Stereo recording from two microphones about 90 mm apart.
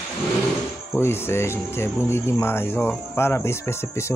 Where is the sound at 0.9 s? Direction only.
25° left (ahead or behind).